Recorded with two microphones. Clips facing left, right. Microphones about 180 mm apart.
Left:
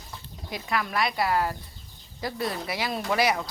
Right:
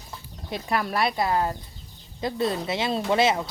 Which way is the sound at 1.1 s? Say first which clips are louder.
Right 1 dB; 20° right (ahead or behind).